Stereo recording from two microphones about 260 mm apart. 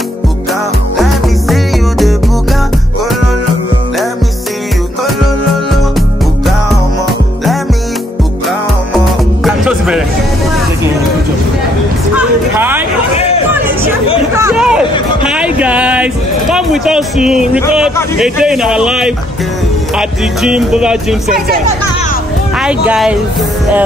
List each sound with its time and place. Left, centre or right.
0.9 s music: centre
8.9 s music: centre
12.2 s a sound: centre
13.1 s chatter: left
13.5 s music: centre
14.3 s a sound: centre
15.2 s music: centre
18.2 s speech: centre
22.6 s speech: centre